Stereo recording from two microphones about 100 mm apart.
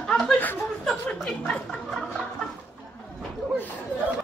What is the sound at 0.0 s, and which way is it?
Chuckle, 5° left (ahead or behind).